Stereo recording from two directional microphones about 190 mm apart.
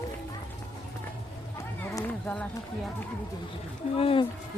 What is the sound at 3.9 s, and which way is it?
Speech, 30° left (ahead or behind).